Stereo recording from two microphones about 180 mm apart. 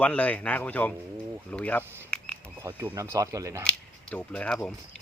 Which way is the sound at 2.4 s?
15° right (ahead or behind).